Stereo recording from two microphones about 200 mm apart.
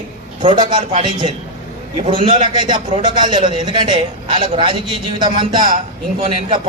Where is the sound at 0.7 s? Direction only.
25° right (ahead or behind).